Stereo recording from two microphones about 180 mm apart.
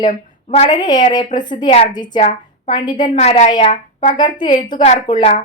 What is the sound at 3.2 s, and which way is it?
Speech, 35° left (ahead or behind).